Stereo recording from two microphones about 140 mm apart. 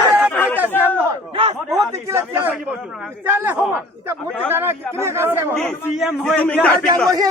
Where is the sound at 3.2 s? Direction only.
15° right (ahead or behind).